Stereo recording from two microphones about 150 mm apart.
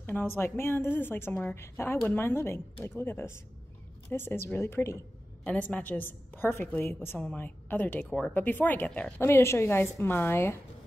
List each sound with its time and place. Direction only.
0.0 s a woman's voice: 15° left (ahead or behind)